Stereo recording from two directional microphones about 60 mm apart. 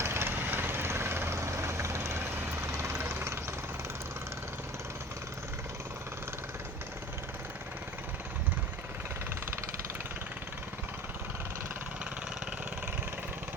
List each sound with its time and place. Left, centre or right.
0.0 s vehicle: right
3.0 s vehicle: right